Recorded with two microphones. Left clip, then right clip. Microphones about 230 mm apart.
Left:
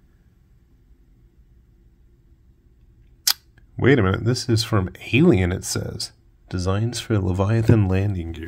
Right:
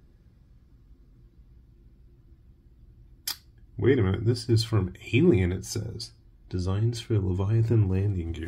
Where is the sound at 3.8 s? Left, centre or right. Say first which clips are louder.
Left 6 dB; left.